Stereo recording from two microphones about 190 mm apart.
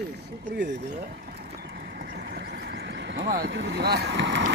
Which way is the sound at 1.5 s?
50° right (ahead or behind).